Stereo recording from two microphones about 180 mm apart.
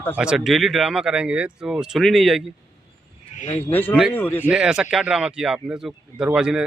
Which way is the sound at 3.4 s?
40° left (ahead or behind).